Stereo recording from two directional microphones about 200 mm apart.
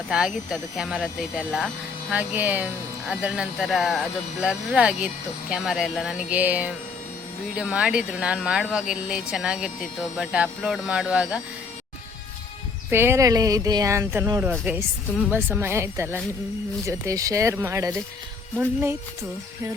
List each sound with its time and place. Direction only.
0.5 s speech: 5° right (ahead or behind)
12.9 s speech: 10° right (ahead or behind)